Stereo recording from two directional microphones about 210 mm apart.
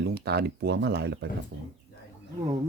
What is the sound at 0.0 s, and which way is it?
Speech, 50° right (ahead or behind).